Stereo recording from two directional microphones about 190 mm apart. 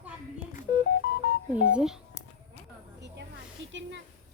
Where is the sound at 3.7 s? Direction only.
70° right (ahead or behind).